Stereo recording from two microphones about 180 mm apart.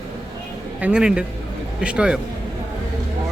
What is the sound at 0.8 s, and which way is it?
A man's voice, 5° right (ahead or behind).